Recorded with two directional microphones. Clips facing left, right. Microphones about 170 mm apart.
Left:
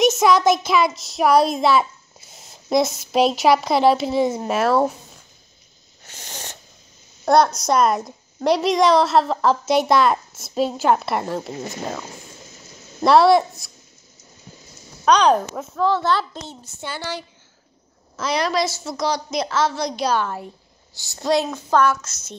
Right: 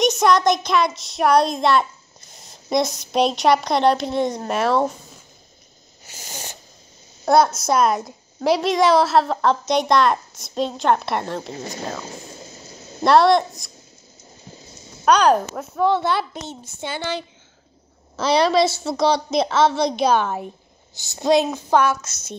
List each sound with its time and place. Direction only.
0.0 s a child's voice: 5° left (ahead or behind)
6.0 s a sound: 5° right (ahead or behind)
7.2 s a woman's voice: 5° right (ahead or behind)
11.5 s speech: 35° right (ahead or behind)
12.3 s a sound: 35° right (ahead or behind)
13.0 s a woman's voice: centre (ahead or behind)
14.5 s a sound: 25° right (ahead or behind)
15.0 s speech: 5° right (ahead or behind)
15.8 s a woman's voice: 20° right (ahead or behind)
18.2 s a woman's voice: 30° right (ahead or behind)